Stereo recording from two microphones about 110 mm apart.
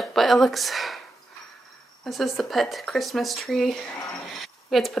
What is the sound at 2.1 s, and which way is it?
A woman's voice, centre (ahead or behind).